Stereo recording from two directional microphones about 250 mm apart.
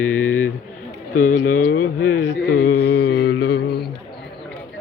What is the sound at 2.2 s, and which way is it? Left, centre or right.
Mantra, left.